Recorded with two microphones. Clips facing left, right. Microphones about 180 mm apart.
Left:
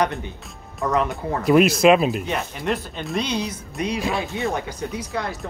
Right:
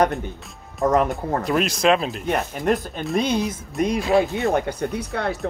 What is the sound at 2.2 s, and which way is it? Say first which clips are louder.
Speech: right 4 dB; 50° right (ahead or behind).